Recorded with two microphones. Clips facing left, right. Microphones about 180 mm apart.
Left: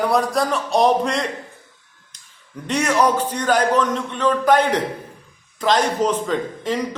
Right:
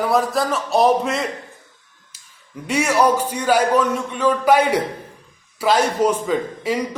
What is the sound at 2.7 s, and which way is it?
A man's voice, 10° right (ahead or behind).